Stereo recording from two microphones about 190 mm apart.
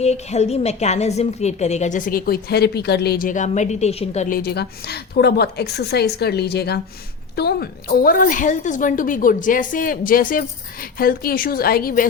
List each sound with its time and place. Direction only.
0.0 s a woman's voice: 35° left (ahead or behind)